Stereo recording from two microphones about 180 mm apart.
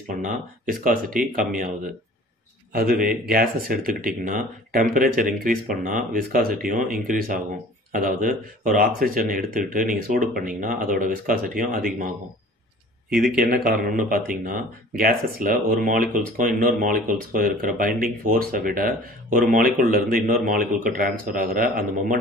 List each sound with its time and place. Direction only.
0.1 s speech: 50° right (ahead or behind)
2.7 s speech: 55° right (ahead or behind)
13.1 s speech: 5° right (ahead or behind)
13.4 s speech: 55° right (ahead or behind)